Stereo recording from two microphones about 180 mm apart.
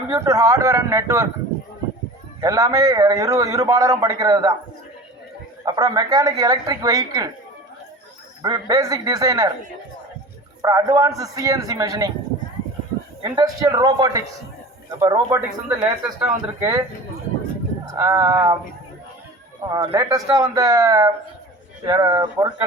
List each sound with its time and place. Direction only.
0.1 s speech: 15° right (ahead or behind)
2.4 s a man's voice: 20° right (ahead or behind)
5.6 s a man's voice: 25° right (ahead or behind)
8.4 s a man's voice: 25° right (ahead or behind)
10.6 s a man's voice: 20° right (ahead or behind)
13.2 s a man's voice: 20° right (ahead or behind)
17.9 s a man's voice: 20° right (ahead or behind)
19.6 s a man's voice: 20° right (ahead or behind)